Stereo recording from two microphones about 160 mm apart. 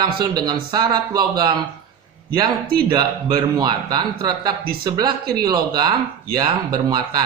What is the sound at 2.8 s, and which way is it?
Speech, 25° right (ahead or behind).